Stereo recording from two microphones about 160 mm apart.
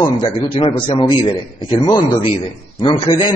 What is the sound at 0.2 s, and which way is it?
A man's voice, 30° left (ahead or behind).